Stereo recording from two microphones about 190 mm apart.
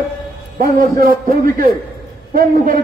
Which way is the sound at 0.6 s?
50° right (ahead or behind).